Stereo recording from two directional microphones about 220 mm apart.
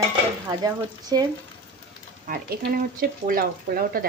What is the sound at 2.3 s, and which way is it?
Speech, 40° right (ahead or behind).